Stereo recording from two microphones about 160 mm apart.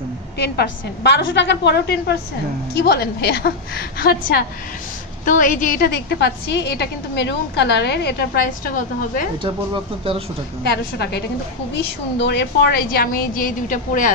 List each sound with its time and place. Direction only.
0.4 s a woman's voice: 90° left
5.2 s a woman's voice: 55° left (ahead or behind); by 8.7 s 90° left
8.7 s a woman's voice: 55° left (ahead or behind)
10.6 s a woman's voice: 90° left; by 14.1 s 55° left (ahead or behind)